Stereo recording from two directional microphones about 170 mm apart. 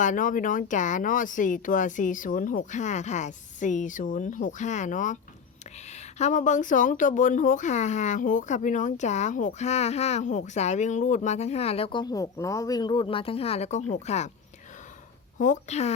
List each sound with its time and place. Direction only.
0.0 s speech: 50° left (ahead or behind)
6.1 s speech: 45° left (ahead or behind)
15.4 s speech: 45° left (ahead or behind)